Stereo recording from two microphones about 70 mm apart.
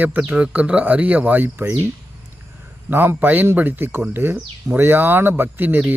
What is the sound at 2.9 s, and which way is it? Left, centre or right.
A man's voice, right.